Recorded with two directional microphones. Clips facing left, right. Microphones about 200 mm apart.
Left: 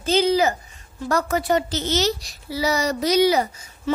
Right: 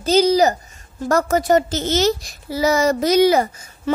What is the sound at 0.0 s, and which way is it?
A child's voice, 40° right (ahead or behind).